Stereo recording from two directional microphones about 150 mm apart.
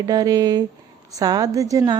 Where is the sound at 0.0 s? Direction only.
25° right (ahead or behind).